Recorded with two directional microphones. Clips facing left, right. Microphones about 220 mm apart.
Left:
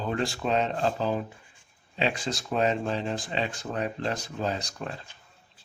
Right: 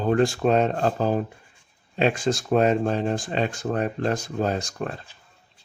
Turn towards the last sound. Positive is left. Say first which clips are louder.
# right 5 dB
turn(degrees=-50)  # may be behind; listen again after turning